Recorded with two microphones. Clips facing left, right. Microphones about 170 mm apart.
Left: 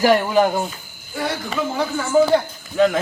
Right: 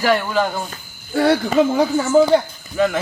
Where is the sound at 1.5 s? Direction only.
45° right (ahead or behind).